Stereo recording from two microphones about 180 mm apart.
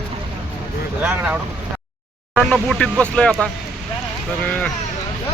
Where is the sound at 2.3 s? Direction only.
Centre (ahead or behind).